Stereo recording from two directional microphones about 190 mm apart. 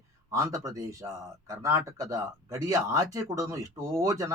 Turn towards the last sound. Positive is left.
turn(degrees=-15)  # may be behind; listen again after turning